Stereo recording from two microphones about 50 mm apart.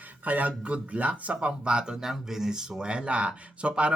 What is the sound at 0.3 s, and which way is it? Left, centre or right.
Speech, right.